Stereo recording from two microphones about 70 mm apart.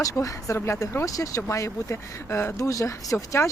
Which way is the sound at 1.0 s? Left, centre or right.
Left.